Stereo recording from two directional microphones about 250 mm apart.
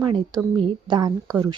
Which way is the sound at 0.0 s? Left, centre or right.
Centre.